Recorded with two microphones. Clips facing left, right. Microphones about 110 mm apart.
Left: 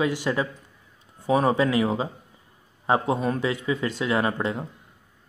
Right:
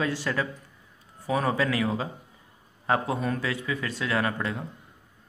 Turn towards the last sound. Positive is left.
turn(degrees=20)  # may be behind; listen again after turning